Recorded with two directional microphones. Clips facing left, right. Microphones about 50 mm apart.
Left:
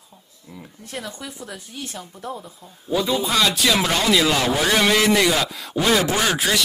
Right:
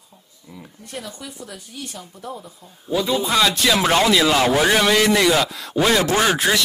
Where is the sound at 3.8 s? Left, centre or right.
Right.